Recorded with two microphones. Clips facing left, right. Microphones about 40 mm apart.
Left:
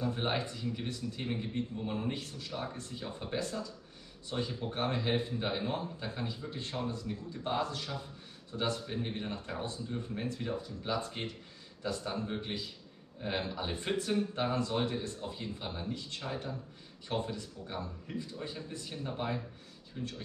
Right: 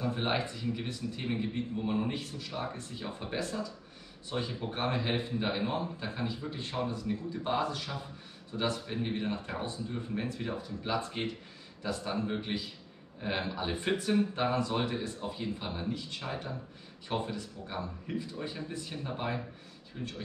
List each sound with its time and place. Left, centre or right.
0.0 s a man's voice: centre
3.3 s speech: centre
4.3 s a man's voice: centre
12.4 s a man's voice: centre